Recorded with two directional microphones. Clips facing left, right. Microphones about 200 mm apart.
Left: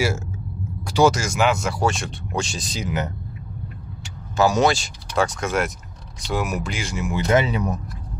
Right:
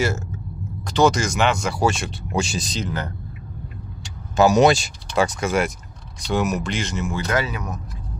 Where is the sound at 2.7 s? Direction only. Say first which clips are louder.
Left 4 dB; 15° left (ahead or behind).